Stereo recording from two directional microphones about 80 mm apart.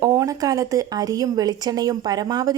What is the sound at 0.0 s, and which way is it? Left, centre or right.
A woman's voice, right.